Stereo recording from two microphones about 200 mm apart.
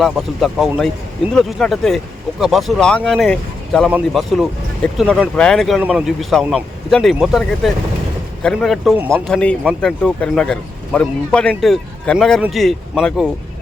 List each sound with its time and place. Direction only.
0.0 s speech: centre (ahead or behind)